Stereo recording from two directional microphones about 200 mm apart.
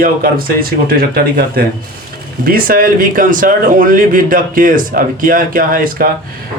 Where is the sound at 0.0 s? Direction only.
45° right (ahead or behind).